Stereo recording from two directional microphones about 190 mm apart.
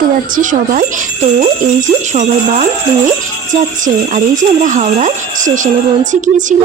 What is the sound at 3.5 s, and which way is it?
Speech, 40° right (ahead or behind).